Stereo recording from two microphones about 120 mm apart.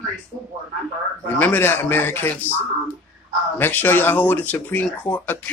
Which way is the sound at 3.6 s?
15° left (ahead or behind).